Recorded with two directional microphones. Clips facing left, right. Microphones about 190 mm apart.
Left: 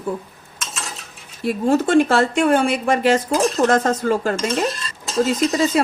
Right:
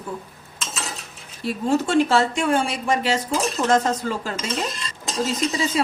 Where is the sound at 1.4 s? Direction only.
55° left (ahead or behind).